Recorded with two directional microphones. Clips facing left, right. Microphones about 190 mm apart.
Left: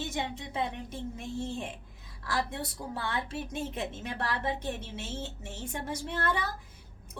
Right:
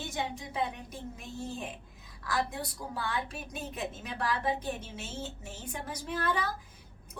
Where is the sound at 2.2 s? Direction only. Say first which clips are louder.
Even; 25° left (ahead or behind).